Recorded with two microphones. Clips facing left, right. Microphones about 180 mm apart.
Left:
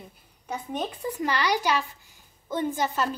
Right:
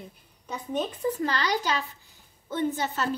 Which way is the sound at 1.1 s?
10° left (ahead or behind).